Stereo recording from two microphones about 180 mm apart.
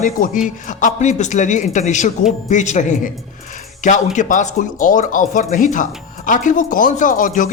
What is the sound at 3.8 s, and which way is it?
Speech, 45° left (ahead or behind).